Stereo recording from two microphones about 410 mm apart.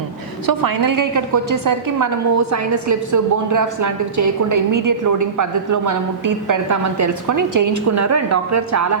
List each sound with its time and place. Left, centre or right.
0.4 s a woman's voice: right